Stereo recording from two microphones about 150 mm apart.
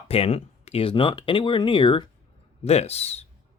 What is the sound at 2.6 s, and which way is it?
Speech, 45° left (ahead or behind).